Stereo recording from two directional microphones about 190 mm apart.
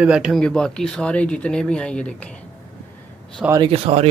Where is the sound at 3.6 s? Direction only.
30° right (ahead or behind).